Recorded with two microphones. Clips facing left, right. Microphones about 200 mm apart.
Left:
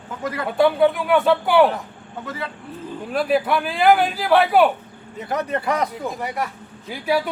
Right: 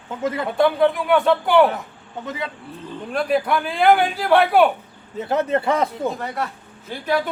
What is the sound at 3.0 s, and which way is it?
Speech, 5° left (ahead or behind).